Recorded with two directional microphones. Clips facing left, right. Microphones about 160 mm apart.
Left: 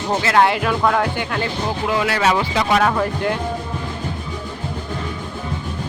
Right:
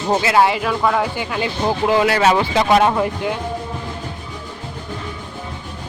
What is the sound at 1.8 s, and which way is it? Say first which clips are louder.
Speech: right 4 dB; 30° right (ahead or behind).